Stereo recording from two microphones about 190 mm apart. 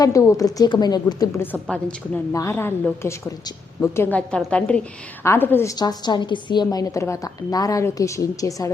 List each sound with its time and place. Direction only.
0.0 s a woman's voice: 15° left (ahead or behind)
1.6 s a woman's voice: 5° left (ahead or behind)